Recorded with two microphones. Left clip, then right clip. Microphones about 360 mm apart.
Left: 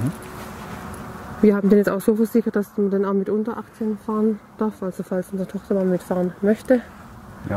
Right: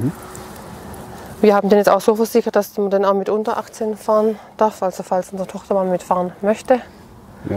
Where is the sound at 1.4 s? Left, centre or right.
Right.